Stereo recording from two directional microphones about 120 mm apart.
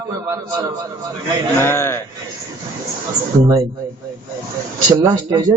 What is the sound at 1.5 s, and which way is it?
Speech, 20° left (ahead or behind).